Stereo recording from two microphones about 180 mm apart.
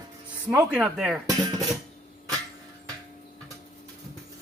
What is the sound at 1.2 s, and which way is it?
Speech, 20° right (ahead or behind).